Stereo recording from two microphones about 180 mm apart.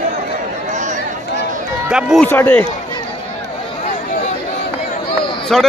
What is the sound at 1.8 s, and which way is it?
Speech, 5° right (ahead or behind).